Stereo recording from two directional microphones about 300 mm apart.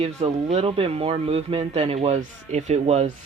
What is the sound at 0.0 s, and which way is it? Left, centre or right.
Speech, right.